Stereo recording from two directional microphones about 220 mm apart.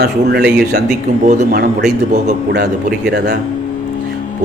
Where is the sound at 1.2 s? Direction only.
35° right (ahead or behind).